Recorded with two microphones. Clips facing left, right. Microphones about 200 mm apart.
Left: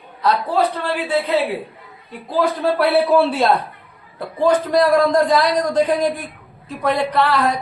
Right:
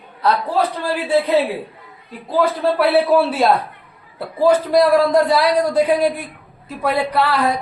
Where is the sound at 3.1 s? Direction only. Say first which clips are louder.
Even; 5° right (ahead or behind).